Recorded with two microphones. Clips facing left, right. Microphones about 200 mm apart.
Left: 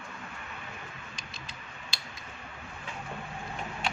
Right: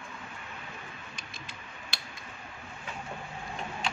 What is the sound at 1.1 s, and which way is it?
Mechanisms, 55° right (ahead or behind).